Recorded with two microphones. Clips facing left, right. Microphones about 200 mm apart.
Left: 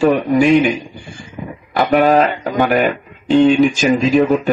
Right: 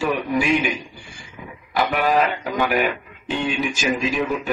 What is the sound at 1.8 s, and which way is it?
Speech, 40° left (ahead or behind).